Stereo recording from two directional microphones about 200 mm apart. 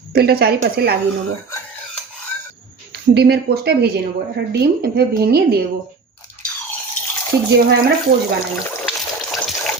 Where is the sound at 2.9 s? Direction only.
55° right (ahead or behind).